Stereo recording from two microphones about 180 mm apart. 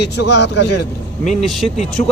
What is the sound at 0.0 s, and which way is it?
Speech, 70° left (ahead or behind).